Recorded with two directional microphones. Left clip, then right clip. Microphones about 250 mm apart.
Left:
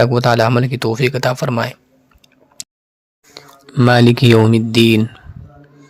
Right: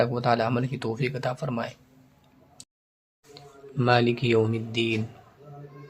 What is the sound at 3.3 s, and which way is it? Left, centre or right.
Speech, left.